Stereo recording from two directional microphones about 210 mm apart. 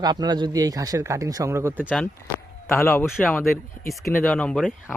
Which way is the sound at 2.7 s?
15° left (ahead or behind).